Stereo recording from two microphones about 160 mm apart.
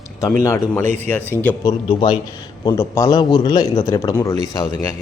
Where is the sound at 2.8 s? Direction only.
20° left (ahead or behind).